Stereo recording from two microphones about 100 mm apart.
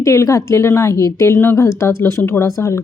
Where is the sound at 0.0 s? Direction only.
30° left (ahead or behind).